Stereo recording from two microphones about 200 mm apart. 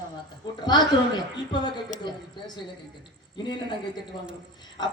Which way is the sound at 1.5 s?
20° left (ahead or behind).